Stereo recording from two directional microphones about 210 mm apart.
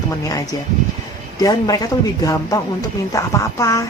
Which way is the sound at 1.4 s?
15° left (ahead or behind).